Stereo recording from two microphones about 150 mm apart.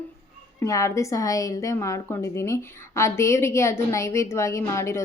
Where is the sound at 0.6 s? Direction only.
20° left (ahead or behind).